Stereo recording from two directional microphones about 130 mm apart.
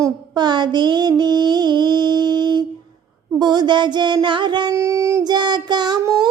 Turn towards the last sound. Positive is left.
turn(degrees=-30)  # may be behind; listen again after turning